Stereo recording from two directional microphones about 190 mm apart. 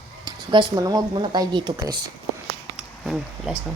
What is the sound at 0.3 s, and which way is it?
Speech, 20° right (ahead or behind).